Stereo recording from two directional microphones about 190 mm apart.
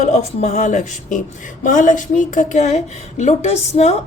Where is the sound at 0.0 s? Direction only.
35° left (ahead or behind).